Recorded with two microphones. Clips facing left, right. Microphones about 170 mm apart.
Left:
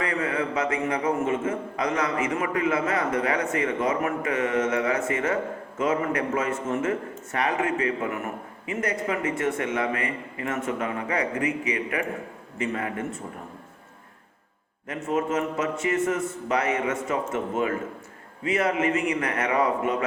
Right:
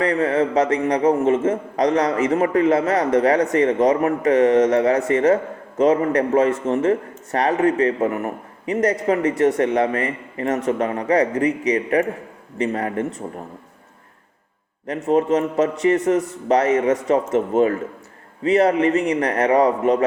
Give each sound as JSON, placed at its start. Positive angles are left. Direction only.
{"t": 0.0, "sound": "a man's voice", "side_deg": -40}
{"t": 14.8, "sound": "a man's voice", "side_deg": -35}